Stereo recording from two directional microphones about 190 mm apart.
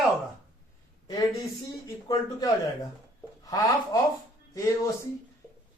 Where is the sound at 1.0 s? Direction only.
20° left (ahead or behind).